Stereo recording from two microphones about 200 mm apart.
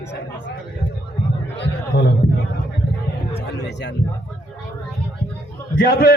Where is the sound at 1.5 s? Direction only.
55° left (ahead or behind).